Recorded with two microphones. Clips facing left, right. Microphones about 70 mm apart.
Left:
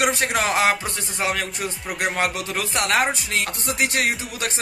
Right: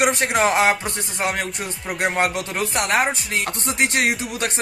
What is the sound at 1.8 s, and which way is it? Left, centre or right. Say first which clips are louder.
Music: right 4 dB; centre.